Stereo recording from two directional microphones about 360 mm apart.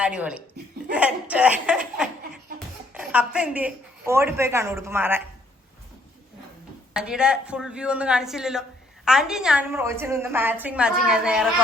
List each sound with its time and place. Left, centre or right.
0.0 s a woman's voice: centre
0.9 s laughter: centre
2.9 s a woman's voice: centre
6.9 s a woman's voice: centre